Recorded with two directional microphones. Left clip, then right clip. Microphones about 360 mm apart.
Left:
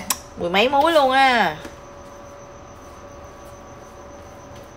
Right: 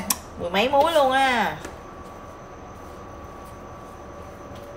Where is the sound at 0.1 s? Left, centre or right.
Left.